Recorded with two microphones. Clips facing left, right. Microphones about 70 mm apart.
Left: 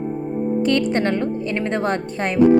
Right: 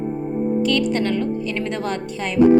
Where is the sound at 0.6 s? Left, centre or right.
Left.